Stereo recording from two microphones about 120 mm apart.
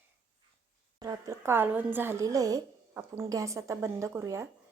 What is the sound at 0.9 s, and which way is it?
A woman's voice, 25° right (ahead or behind).